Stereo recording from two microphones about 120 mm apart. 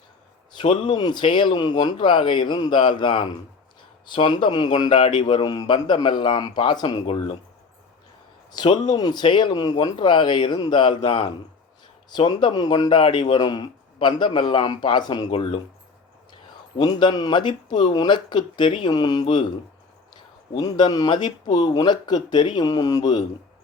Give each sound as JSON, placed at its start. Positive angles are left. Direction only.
{"t": 0.6, "sound": "speech", "side_deg": 45}
{"t": 8.5, "sound": "speech", "side_deg": 35}
{"t": 15.3, "sound": "speech", "side_deg": 50}
{"t": 16.7, "sound": "speech", "side_deg": 40}